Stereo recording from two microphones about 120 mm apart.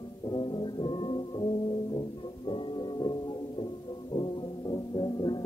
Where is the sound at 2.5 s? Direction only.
40° left (ahead or behind).